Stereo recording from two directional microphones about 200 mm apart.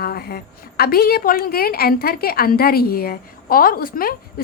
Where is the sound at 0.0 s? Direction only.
50° left (ahead or behind).